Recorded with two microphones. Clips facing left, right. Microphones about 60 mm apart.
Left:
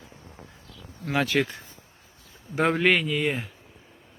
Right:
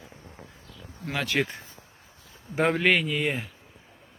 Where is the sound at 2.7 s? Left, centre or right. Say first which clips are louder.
Left 1 dB; centre.